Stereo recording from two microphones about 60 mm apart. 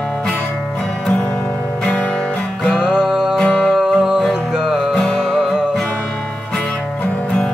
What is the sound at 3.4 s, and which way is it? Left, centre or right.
Music, centre.